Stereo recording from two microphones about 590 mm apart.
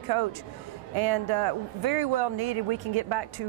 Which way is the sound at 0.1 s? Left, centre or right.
Right.